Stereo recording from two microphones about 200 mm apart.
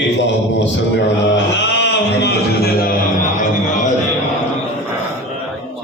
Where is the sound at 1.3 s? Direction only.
65° left (ahead or behind).